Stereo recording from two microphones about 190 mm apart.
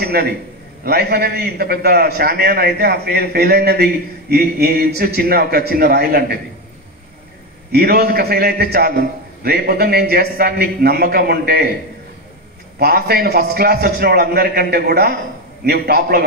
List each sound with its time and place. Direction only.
0.0 s a man's voice: 55° right (ahead or behind)
7.7 s a man's voice: 55° right (ahead or behind)
12.7 s a man's voice: 55° right (ahead or behind)